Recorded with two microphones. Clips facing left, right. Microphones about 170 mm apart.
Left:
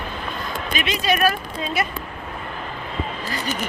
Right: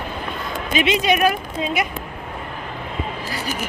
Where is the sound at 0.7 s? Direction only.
25° right (ahead or behind).